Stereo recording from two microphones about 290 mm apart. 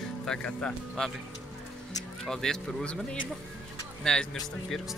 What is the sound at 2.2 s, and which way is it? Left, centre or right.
Speech, centre.